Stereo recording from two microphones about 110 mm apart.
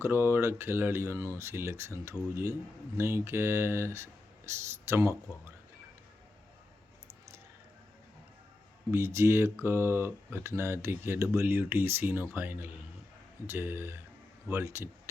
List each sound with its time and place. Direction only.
0.0 s speech: 20° right (ahead or behind)
8.9 s a man's voice: 25° right (ahead or behind)